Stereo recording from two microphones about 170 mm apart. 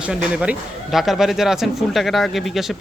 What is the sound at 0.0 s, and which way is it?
A man's voice, 5° right (ahead or behind).